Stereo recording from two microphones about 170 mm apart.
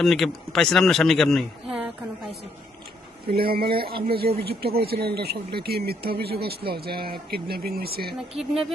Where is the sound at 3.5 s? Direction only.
65° right (ahead or behind).